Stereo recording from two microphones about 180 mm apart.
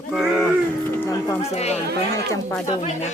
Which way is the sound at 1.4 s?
35° left (ahead or behind).